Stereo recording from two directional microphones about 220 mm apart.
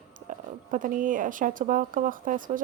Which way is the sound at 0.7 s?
35° right (ahead or behind).